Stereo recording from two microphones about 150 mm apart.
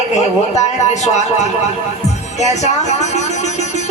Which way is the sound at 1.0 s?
50° left (ahead or behind).